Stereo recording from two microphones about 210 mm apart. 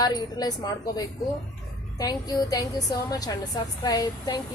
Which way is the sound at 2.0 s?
15° left (ahead or behind).